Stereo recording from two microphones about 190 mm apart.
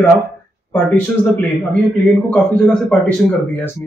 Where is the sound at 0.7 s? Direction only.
10° left (ahead or behind).